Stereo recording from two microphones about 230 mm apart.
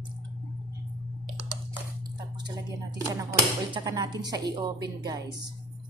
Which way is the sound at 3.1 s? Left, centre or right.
Centre.